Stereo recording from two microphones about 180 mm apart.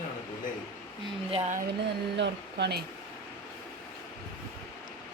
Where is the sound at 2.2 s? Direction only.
70° right (ahead or behind).